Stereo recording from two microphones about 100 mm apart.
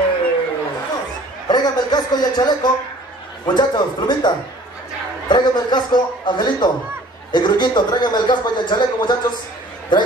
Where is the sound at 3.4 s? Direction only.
45° left (ahead or behind).